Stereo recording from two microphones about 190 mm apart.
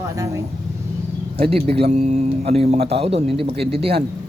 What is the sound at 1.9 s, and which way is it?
Speech, 35° right (ahead or behind).